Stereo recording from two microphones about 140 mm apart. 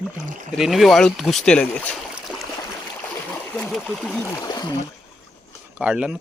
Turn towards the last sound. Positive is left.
turn(degrees=-10)  # may be behind; listen again after turning